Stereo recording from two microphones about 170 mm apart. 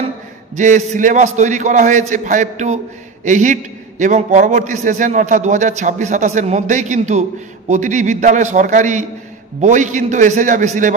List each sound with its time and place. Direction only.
0.6 s a man's voice: 45° right (ahead or behind)